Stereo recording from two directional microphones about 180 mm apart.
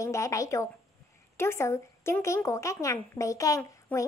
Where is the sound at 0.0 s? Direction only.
15° left (ahead or behind).